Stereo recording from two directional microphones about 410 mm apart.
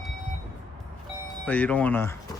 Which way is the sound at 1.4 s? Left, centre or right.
Centre.